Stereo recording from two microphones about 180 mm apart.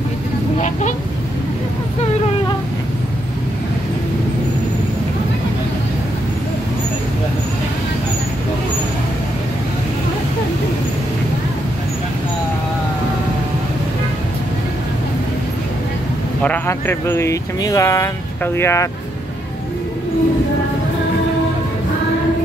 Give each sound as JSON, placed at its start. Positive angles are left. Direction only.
{"t": 16.4, "sound": "speech", "side_deg": 15}